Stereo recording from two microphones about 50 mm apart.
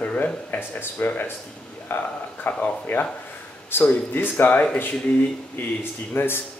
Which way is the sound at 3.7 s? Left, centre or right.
Left.